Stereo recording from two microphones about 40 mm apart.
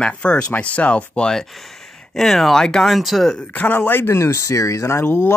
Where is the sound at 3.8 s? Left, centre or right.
Left.